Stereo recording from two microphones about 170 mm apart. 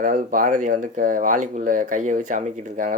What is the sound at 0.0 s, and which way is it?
Speech, 55° right (ahead or behind).